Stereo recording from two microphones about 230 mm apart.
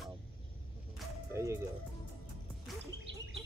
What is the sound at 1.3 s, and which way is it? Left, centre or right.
Speech, centre.